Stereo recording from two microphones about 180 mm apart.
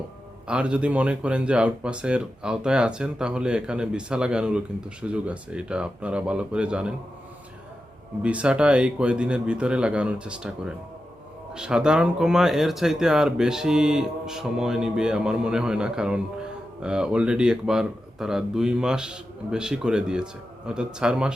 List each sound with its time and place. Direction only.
0.4 s speech: 5° right (ahead or behind)
8.2 s speech: 5° right (ahead or behind)